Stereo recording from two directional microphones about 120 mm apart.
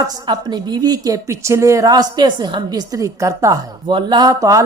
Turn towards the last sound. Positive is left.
turn(degrees=-30)  # may be behind; listen again after turning